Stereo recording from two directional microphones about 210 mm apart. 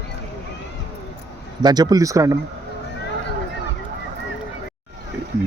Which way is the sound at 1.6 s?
20° right (ahead or behind).